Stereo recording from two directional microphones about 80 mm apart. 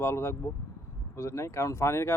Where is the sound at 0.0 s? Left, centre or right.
Left.